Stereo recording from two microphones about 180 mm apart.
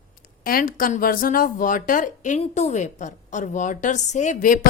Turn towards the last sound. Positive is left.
turn(degrees=50)  # may be behind; listen again after turning